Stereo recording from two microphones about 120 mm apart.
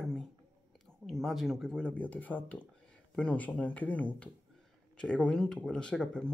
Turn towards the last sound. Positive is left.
turn(degrees=5)  # may be behind; listen again after turning